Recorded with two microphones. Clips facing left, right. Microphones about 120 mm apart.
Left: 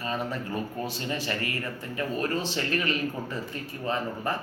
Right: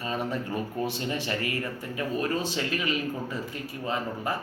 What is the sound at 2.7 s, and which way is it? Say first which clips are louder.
Speech: left 1 dB; 10° right (ahead or behind).